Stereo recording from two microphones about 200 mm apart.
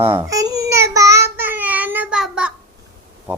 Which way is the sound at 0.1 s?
15° right (ahead or behind).